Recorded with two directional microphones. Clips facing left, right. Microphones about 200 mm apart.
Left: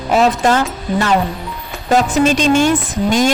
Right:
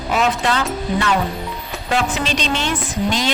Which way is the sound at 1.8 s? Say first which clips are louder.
Left 8 dB; 45° left (ahead or behind).